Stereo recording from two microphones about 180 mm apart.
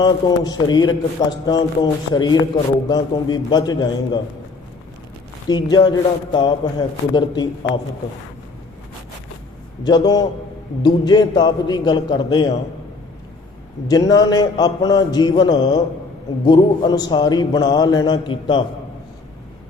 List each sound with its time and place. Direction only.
0.0 s a man's voice: 20° left (ahead or behind)
5.5 s a man's voice: 25° left (ahead or behind)
9.8 s a man's voice: 25° left (ahead or behind)
13.8 s a man's voice: 20° left (ahead or behind)